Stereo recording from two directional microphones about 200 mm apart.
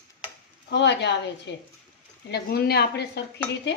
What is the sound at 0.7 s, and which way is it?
Speech, 60° left (ahead or behind).